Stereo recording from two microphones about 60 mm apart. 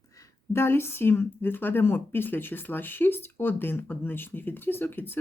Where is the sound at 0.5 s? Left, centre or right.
Left.